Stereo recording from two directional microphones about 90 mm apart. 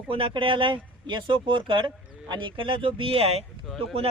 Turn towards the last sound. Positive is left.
turn(degrees=-90)